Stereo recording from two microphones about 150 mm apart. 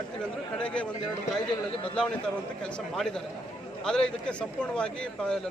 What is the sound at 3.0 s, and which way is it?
Speech, 5° left (ahead or behind).